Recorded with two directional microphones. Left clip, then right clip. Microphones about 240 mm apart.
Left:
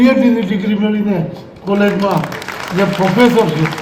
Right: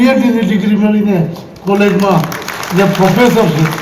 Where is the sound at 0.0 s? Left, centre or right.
Left.